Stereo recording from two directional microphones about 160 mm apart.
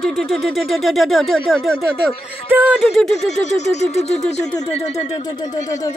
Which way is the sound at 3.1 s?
45° left (ahead or behind).